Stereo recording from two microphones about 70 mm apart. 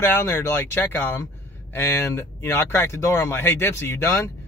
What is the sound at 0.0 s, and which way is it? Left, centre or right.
Speech, left.